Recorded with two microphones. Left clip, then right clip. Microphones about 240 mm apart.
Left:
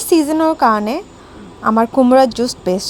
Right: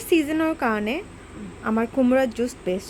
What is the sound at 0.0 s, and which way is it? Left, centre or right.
A woman's voice, centre.